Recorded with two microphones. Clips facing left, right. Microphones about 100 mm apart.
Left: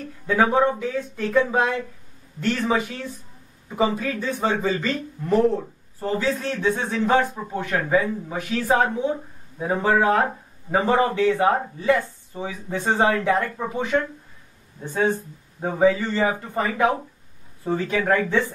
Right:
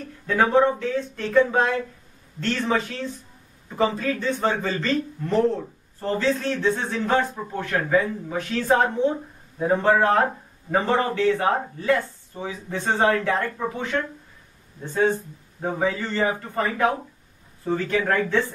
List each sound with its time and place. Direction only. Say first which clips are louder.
0.3 s speech: even; 10° left (ahead or behind)